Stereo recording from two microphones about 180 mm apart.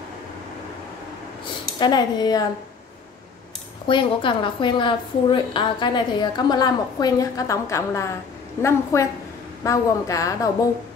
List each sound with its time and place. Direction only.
1.8 s a woman's voice: 25° left (ahead or behind)
3.8 s a woman's voice: 25° left (ahead or behind)